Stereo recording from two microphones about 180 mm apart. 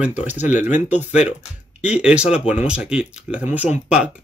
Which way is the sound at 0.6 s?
40° left (ahead or behind).